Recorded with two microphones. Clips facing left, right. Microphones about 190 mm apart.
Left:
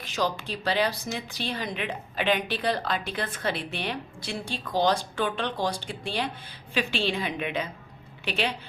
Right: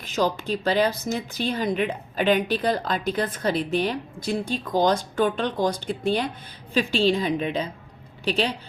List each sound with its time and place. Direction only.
0.0 s speech: 45° right (ahead or behind)
6.7 s a woman's voice: 35° right (ahead or behind)